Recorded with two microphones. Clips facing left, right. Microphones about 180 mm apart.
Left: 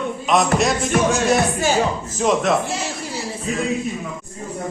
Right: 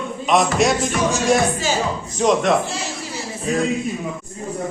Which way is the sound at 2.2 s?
Centre (ahead or behind).